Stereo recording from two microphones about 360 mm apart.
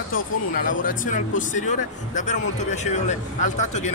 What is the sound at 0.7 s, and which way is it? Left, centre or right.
A man's voice, left.